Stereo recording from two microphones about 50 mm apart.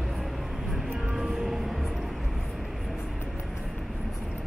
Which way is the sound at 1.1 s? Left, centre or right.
Centre.